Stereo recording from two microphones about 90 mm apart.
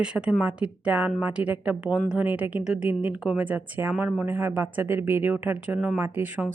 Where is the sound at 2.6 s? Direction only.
5° right (ahead or behind).